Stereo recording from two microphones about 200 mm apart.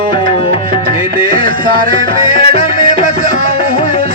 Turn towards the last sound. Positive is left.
turn(degrees=30)  # may be behind; listen again after turning